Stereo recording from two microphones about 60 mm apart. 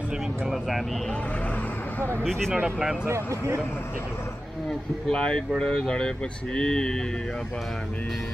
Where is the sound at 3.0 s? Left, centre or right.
Right.